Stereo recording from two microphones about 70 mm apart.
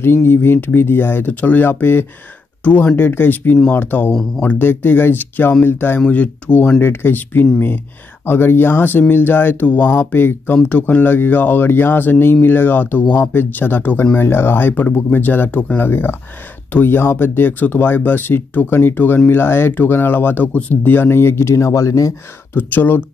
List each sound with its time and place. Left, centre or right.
0.0 s speech: left
5.9 s speech: centre
6.8 s speech: left
22.5 s speech: left